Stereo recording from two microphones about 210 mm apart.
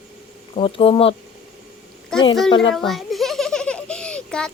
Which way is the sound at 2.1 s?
Centre (ahead or behind).